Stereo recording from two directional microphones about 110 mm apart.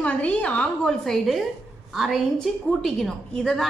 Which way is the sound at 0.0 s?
10° left (ahead or behind).